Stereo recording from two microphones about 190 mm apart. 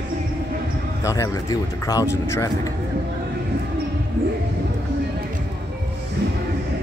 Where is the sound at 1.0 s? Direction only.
15° left (ahead or behind).